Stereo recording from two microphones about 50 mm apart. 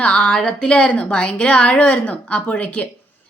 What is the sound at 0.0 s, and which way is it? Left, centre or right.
A woman's voice, left.